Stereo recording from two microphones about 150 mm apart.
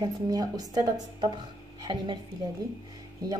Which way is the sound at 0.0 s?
25° right (ahead or behind).